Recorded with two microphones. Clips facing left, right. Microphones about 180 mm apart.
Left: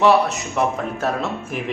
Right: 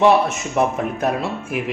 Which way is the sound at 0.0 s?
25° right (ahead or behind).